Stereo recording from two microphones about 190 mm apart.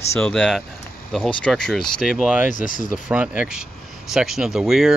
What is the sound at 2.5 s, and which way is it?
Speech, 45° left (ahead or behind).